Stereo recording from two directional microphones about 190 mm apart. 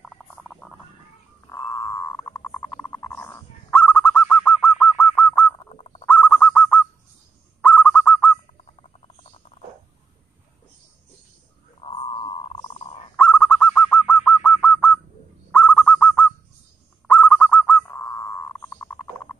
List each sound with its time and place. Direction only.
0.0 s a sound: 5° left (ahead or behind)
1.5 s frog: 15° left (ahead or behind)
6.0 s bird: 5° left (ahead or behind)
7.6 s owl: 5° left (ahead or behind)
11.8 s a sound: 30° left (ahead or behind)
13.1 s bird: 5° left (ahead or behind)